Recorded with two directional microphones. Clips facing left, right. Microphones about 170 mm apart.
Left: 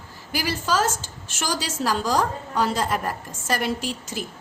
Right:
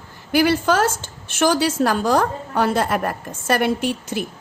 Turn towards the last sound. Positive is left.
turn(degrees=-60)  # may be behind; listen again after turning